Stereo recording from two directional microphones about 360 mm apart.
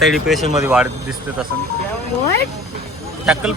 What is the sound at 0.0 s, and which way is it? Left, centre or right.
Speech, centre.